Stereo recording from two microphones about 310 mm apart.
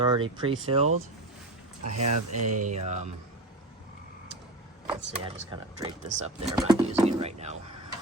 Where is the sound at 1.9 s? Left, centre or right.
Right.